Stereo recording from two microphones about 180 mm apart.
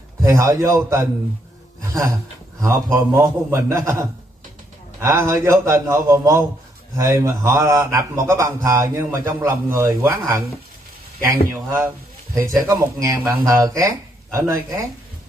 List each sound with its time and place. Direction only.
0.2 s a man's voice: 20° right (ahead or behind)
2.6 s a man's voice: 15° right (ahead or behind)
12.4 s a man's voice: 15° right (ahead or behind)